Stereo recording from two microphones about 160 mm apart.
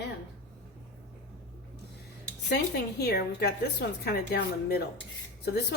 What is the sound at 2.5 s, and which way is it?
A woman's voice, 90° left.